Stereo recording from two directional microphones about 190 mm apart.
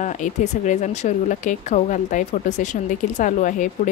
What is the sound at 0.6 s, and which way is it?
Speech, 40° left (ahead or behind).